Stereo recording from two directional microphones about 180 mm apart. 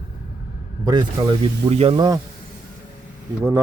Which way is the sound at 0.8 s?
25° right (ahead or behind).